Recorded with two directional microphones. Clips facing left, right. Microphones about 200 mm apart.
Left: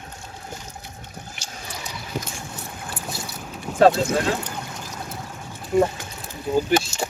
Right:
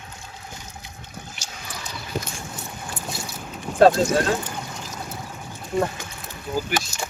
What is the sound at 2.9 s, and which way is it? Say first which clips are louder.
Boat: even; 5° left (ahead or behind).